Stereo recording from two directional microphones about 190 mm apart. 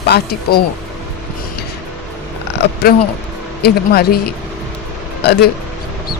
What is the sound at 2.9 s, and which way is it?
Speech, 50° left (ahead or behind).